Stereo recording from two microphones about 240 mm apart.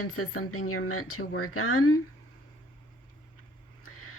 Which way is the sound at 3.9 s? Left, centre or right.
Left.